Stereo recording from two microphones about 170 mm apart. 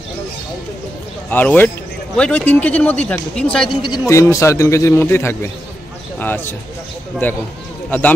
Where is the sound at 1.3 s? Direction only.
10° left (ahead or behind).